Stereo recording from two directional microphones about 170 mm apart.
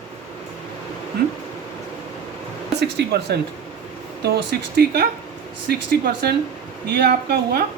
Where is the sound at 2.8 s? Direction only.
80° right.